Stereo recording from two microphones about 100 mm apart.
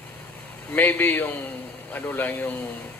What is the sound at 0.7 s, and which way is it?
A man's voice, 20° left (ahead or behind).